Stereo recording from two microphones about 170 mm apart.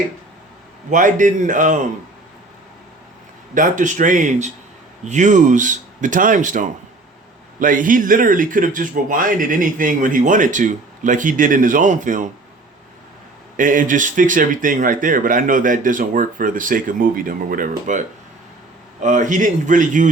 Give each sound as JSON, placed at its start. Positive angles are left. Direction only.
{"t": 0.9, "sound": "speech", "side_deg": -50}
{"t": 3.5, "sound": "speech", "side_deg": -50}
{"t": 13.6, "sound": "speech", "side_deg": -50}
{"t": 19.0, "sound": "speech", "side_deg": -45}